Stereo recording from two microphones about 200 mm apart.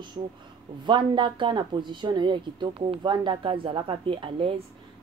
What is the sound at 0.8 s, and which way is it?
A woman's voice, 25° right (ahead or behind).